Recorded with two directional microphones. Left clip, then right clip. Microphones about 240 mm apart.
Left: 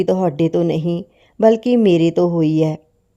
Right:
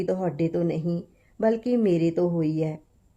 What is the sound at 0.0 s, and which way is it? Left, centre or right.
Speech, left.